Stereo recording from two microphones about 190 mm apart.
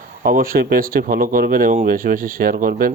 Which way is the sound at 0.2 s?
50° right (ahead or behind).